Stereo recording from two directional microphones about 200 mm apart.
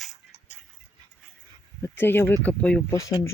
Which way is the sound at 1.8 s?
10° left (ahead or behind).